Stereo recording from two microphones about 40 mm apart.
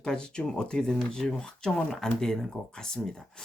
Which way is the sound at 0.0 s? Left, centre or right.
Left.